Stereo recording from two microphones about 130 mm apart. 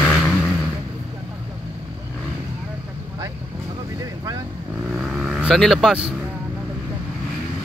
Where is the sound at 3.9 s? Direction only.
25° right (ahead or behind).